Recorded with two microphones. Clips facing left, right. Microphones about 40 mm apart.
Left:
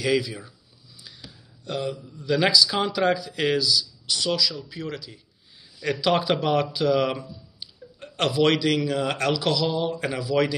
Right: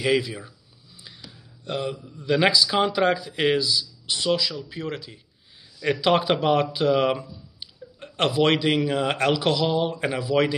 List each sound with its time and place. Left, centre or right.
0.0 s speech: right
1.0 s a sound: right
2.1 s speech: right